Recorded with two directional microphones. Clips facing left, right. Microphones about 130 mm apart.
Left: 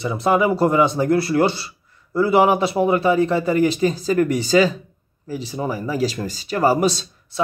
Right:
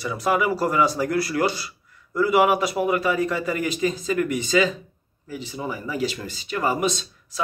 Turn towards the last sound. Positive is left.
turn(degrees=35)  # may be behind; listen again after turning